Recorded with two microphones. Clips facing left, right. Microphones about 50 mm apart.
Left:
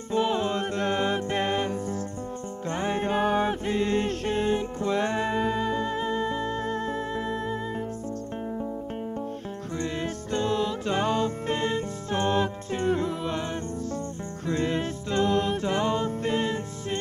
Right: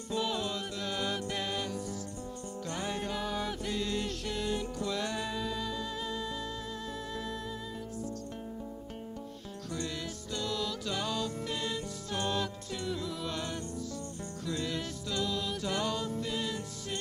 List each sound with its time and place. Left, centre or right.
0.1 s music: left
10.3 s music: left
14.4 s music: left